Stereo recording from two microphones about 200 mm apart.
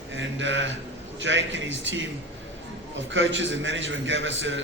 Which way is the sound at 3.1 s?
70° right (ahead or behind).